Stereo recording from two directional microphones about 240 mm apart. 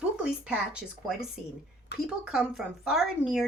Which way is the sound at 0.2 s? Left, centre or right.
Centre.